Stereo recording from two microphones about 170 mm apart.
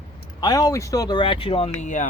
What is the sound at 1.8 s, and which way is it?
Speech, 45° left (ahead or behind).